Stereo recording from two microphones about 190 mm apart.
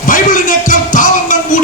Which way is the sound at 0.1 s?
45° left (ahead or behind).